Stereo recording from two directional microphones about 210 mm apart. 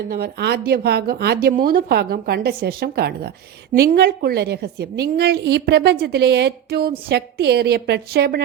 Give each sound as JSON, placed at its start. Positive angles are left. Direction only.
{"t": 0.1, "sound": "a woman's voice", "side_deg": -50}